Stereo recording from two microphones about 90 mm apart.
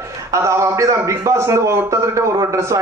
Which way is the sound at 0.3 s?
35° right (ahead or behind).